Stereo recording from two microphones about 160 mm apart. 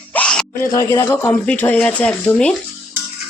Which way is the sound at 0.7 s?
15° left (ahead or behind).